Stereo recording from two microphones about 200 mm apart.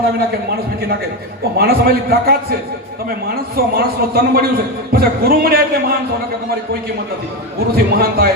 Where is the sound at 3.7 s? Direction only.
50° right (ahead or behind).